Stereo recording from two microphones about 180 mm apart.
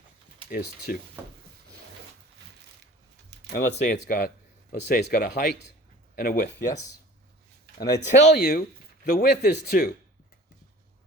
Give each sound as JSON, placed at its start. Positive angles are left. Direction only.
{"t": 0.5, "sound": "speech", "side_deg": 55}
{"t": 1.2, "sound": "speech", "side_deg": -10}
{"t": 3.5, "sound": "speech", "side_deg": 60}
{"t": 7.8, "sound": "speech", "side_deg": 20}
{"t": 8.2, "sound": "speech", "side_deg": 65}